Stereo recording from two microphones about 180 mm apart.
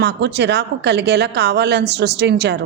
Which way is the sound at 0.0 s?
70° right (ahead or behind).